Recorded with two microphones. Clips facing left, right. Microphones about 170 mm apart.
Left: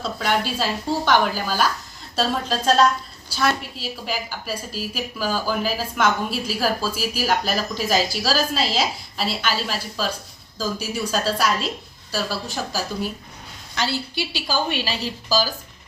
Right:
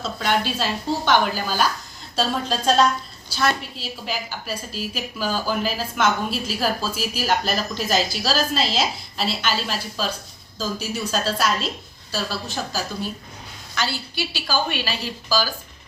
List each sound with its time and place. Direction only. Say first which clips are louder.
0.0 s a woman's voice: even; 5° left (ahead or behind)
13.7 s a woman's voice: left 2 dB; 25° left (ahead or behind)